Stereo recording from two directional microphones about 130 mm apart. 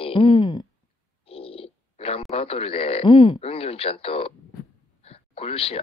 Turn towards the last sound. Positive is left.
turn(degrees=50)  # may be behind; listen again after turning